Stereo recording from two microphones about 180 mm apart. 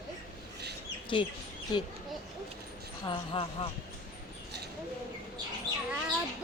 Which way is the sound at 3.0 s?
30° left (ahead or behind).